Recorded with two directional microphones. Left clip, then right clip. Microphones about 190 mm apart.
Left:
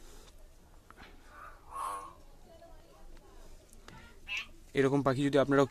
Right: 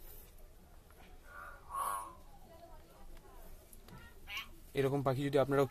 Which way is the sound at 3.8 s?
35° left (ahead or behind).